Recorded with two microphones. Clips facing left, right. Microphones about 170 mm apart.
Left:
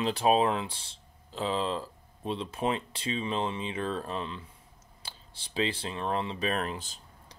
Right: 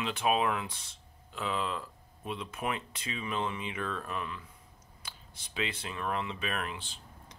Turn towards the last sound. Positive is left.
turn(degrees=40)  # may be behind; listen again after turning